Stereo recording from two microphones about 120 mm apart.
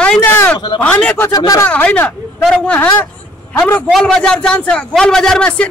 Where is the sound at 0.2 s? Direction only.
20° left (ahead or behind).